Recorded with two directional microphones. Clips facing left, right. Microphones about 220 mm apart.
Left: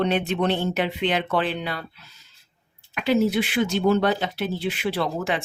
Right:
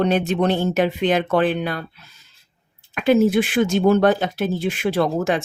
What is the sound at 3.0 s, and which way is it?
Speech, 50° right (ahead or behind).